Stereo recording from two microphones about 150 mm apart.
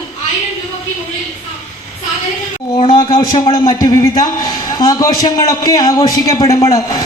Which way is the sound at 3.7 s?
20° left (ahead or behind).